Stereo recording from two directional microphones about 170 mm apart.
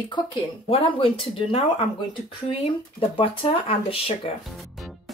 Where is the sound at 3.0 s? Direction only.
35° left (ahead or behind).